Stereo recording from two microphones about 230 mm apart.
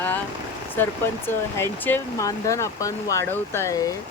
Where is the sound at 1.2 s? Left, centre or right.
Centre.